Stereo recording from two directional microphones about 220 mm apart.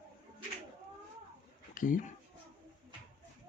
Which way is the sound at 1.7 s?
35° left (ahead or behind).